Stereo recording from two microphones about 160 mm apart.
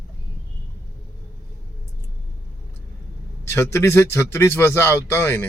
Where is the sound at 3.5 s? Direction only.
15° left (ahead or behind).